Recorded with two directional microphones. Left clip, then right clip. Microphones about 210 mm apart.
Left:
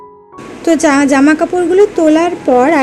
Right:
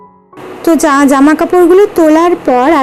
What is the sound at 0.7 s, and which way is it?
A woman's voice, 15° right (ahead or behind).